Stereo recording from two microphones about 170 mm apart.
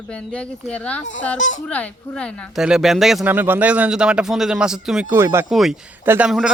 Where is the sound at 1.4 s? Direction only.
45° left (ahead or behind).